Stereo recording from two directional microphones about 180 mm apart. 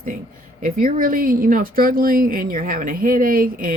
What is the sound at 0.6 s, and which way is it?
Speech, 50° right (ahead or behind).